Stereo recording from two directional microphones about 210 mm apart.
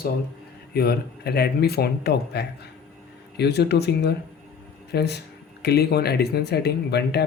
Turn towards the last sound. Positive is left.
turn(degrees=50)  # may be behind; listen again after turning